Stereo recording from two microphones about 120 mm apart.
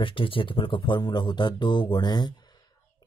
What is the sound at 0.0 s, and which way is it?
Speech, 45° left (ahead or behind).